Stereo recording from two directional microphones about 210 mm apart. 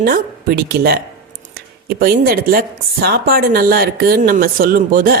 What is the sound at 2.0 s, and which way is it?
A woman's voice, 45° right (ahead or behind).